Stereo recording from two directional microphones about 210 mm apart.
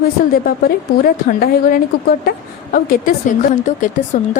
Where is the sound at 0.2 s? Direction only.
45° left (ahead or behind).